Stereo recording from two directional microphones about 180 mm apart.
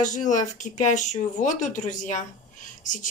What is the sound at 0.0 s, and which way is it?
Speech, 45° left (ahead or behind).